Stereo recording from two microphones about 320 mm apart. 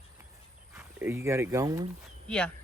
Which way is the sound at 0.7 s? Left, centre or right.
Centre.